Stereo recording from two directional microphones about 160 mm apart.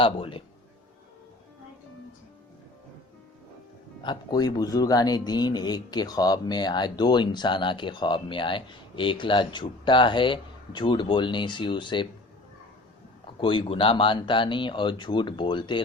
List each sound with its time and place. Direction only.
0.0 s speech: 35° left (ahead or behind)
4.0 s speech: 25° left (ahead or behind)
13.4 s speech: 30° left (ahead or behind)